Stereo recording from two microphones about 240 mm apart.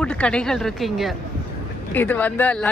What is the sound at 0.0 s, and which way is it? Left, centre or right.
Speech, centre.